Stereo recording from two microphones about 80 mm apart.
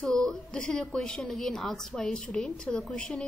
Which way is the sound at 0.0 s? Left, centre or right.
Centre.